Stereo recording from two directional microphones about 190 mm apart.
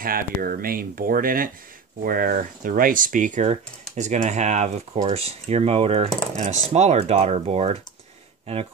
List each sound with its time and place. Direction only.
0.0 s speech: 50° right (ahead or behind)